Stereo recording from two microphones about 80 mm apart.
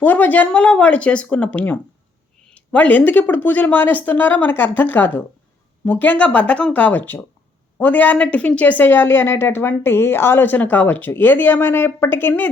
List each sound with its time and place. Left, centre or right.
0.0 s a woman's voice: left